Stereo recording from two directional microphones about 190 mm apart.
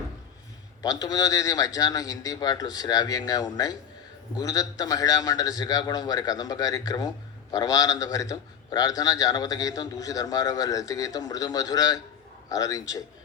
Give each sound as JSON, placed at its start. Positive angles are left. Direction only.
{"t": 0.8, "sound": "a man's voice", "side_deg": 20}